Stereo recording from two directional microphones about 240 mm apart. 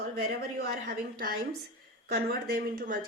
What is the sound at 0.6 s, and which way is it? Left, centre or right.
A woman's voice, right.